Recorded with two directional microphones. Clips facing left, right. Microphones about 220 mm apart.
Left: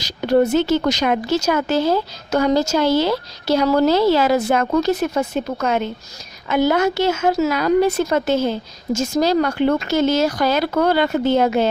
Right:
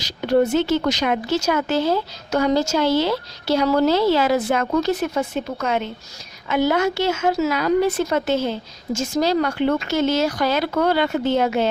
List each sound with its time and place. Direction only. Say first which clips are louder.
0.0 s speech: left 2 dB; 40° left (ahead or behind)